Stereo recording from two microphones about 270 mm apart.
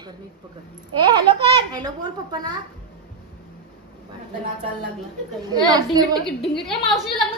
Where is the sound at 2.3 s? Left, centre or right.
Centre.